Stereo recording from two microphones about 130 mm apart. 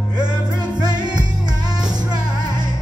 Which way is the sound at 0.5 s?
30° right (ahead or behind).